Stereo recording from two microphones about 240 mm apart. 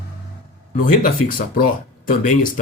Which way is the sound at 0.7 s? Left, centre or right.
Left.